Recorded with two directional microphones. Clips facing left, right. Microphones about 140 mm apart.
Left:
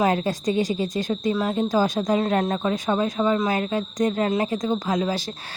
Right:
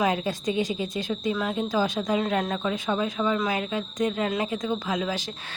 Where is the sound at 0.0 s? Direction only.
45° left (ahead or behind).